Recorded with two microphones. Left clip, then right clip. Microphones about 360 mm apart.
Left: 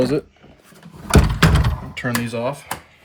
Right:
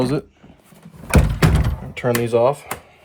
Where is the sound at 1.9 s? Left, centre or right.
Centre.